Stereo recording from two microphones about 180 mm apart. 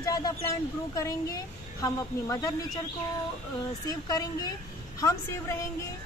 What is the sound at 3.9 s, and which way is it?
Speech, 20° left (ahead or behind).